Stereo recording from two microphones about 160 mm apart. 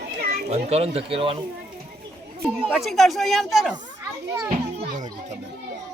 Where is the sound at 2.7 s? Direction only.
Centre (ahead or behind).